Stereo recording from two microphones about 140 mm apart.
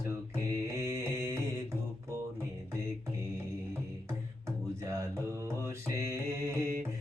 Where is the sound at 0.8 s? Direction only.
20° right (ahead or behind).